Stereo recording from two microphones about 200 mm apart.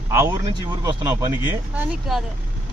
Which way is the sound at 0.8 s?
15° right (ahead or behind).